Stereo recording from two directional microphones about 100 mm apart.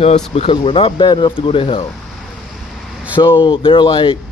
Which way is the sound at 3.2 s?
55° left (ahead or behind).